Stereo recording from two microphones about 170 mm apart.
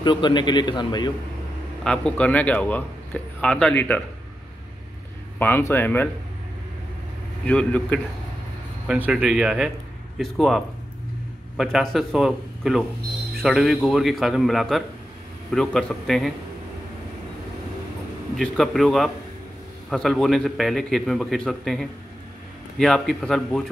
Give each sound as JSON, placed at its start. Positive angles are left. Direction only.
{"t": 0.0, "sound": "a man's voice", "side_deg": 25}
{"t": 1.9, "sound": "a man's voice", "side_deg": 5}
{"t": 5.4, "sound": "a man's voice", "side_deg": 15}
{"t": 7.4, "sound": "a man's voice", "side_deg": 5}
{"t": 8.8, "sound": "a man's voice", "side_deg": -5}
{"t": 18.3, "sound": "a man's voice", "side_deg": 0}